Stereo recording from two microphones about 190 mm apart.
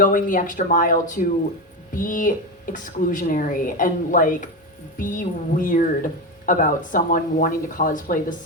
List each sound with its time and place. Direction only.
0.0 s speech: 45° left (ahead or behind)